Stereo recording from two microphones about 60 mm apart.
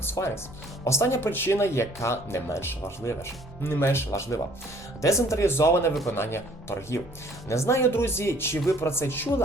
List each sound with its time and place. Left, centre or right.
0.0 s music: left
0.9 s speech: left